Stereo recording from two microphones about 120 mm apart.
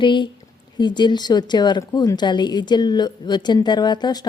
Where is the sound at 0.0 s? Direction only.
40° left (ahead or behind).